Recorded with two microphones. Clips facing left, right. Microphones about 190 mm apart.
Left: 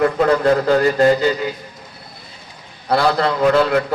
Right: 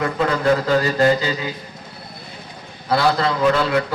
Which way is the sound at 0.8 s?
60° left (ahead or behind).